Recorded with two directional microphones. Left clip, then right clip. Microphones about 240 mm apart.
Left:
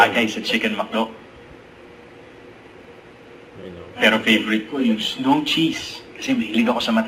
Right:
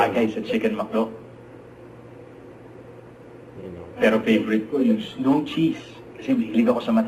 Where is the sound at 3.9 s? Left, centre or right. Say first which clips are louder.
Left 3 dB; centre.